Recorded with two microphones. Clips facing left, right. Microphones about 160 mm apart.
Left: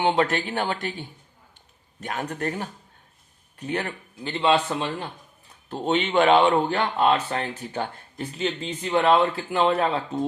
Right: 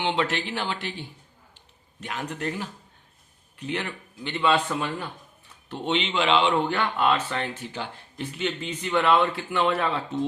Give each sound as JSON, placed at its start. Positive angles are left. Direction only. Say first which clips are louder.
{"t": 0.0, "sound": "speech", "louder": "left 4 dB", "side_deg": 45}
{"t": 4.3, "sound": "speech", "louder": "left 2 dB", "side_deg": 30}
{"t": 5.7, "sound": "speech", "louder": "left 4 dB", "side_deg": 40}
{"t": 6.7, "sound": "speech", "louder": "left 2 dB", "side_deg": 25}
{"t": 7.7, "sound": "speech", "louder": "left 5 dB", "side_deg": 50}
{"t": 8.3, "sound": "speech", "louder": "left 2 dB", "side_deg": 30}